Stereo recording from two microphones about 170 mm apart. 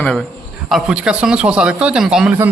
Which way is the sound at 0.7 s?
5° right (ahead or behind).